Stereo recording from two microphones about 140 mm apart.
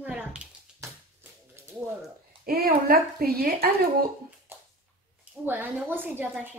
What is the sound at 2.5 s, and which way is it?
Speech, 90° right.